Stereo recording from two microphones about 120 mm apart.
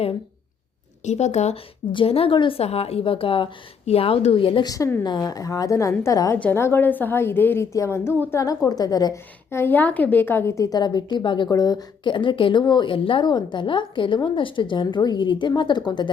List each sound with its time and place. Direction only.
1.0 s speech: 70° left (ahead or behind)
1.9 s a woman's voice: 50° left (ahead or behind)
5.0 s a woman's voice: 35° left (ahead or behind)
9.5 s a woman's voice: 20° left (ahead or behind); by 16.0 s 40° left (ahead or behind)